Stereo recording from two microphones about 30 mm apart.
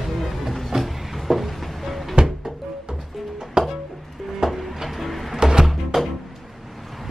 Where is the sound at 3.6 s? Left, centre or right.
Right.